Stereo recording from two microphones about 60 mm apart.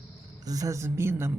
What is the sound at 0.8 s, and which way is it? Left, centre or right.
Speech, right.